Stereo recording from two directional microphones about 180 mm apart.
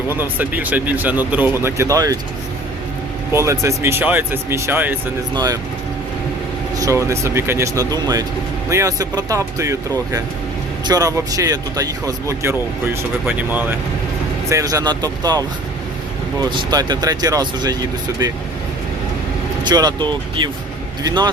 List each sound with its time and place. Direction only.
0.1 s speech: 10° right (ahead or behind)
3.3 s speech: 15° right (ahead or behind)
5.3 s speech: 20° right (ahead or behind)
6.7 s speech: 15° right (ahead or behind)
19.6 s speech: 25° right (ahead or behind)